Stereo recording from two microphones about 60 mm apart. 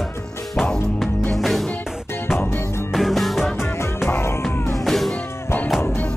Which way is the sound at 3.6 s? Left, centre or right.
Left.